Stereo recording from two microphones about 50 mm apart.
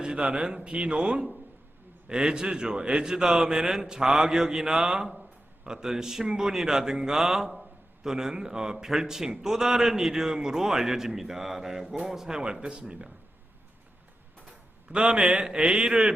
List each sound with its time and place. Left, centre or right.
0.0 s a man's voice: centre
14.9 s a man's voice: centre